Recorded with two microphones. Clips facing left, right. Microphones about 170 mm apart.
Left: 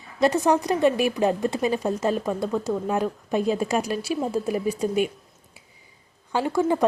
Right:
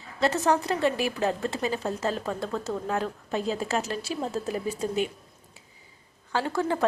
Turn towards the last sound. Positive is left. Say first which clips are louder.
# left 5 dB
turn(degrees=15)  # may be behind; listen again after turning